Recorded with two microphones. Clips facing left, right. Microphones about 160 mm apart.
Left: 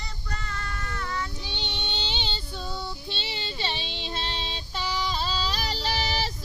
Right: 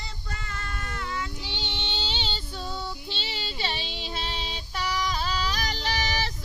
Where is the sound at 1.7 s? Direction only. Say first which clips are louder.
Even; 15° left (ahead or behind).